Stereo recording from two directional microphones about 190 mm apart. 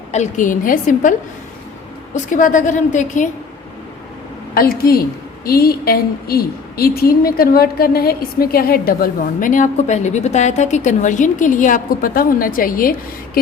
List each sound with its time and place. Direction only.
0.1 s a woman's voice: 40° left (ahead or behind)
2.1 s a woman's voice: 40° left (ahead or behind)
4.5 s a woman's voice: 50° left (ahead or behind)